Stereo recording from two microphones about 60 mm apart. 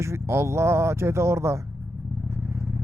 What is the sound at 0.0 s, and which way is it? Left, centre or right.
Speech, right.